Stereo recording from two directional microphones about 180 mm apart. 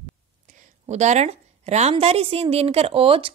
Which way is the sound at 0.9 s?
40° right (ahead or behind).